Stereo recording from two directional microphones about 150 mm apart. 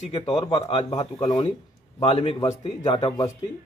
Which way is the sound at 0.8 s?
25° left (ahead or behind).